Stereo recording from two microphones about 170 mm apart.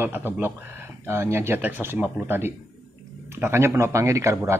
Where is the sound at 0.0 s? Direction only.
15° right (ahead or behind).